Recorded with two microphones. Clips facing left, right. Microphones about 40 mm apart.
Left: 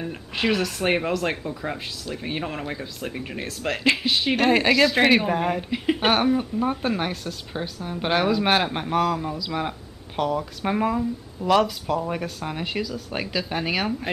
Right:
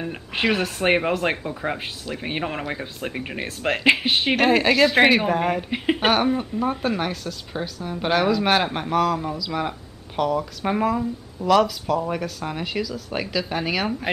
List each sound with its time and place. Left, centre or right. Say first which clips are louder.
0.0 s speech: right 2 dB; right
4.5 s speech: even; centre
4.8 s speech: right 3 dB; centre
5.3 s speech: right 2 dB; centre
11.4 s speech: right 2 dB; centre
14.1 s speech: right 4 dB; centre